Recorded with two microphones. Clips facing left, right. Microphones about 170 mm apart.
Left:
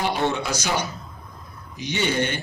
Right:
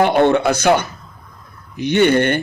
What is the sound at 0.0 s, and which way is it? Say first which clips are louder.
A man's voice: right 11 dB; 60° right (ahead or behind).